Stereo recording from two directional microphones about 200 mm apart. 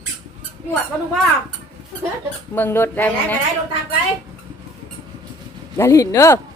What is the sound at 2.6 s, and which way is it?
Speech, 10° left (ahead or behind).